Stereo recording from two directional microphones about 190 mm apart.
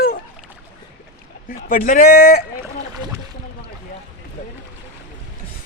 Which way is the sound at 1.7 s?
50° left (ahead or behind).